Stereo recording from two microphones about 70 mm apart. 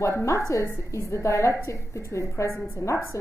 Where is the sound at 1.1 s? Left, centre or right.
Left.